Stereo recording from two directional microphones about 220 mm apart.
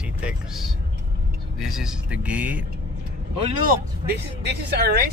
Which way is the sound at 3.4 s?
40° right (ahead or behind).